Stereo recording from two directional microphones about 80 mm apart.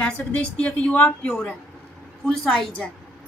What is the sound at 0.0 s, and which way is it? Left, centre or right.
A woman's voice, centre.